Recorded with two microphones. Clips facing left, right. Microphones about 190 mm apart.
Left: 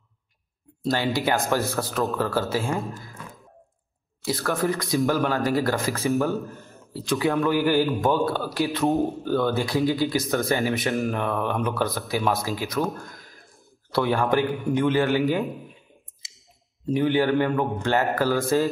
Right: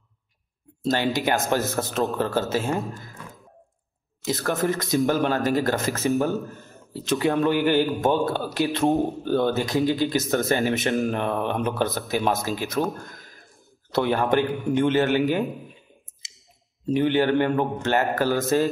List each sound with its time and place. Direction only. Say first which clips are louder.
1.1 s a man's voice: even; 20° right (ahead or behind)
4.2 s a man's voice: even; 20° right (ahead or behind)
8.8 s a man's voice: right 1 dB; centre (ahead or behind)
9.2 s a man's voice: right 1 dB; 25° right (ahead or behind)
13.9 s a man's voice: right 1 dB; 20° right (ahead or behind)
16.8 s a man's voice: right 1 dB; 20° right (ahead or behind)